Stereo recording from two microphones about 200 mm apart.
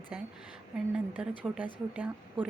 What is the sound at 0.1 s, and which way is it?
A woman's voice, 5° right (ahead or behind).